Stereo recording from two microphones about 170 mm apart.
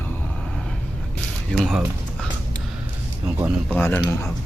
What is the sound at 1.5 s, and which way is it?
Speech, centre (ahead or behind).